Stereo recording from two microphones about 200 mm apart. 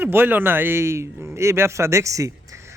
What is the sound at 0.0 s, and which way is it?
A man's voice, 10° right (ahead or behind).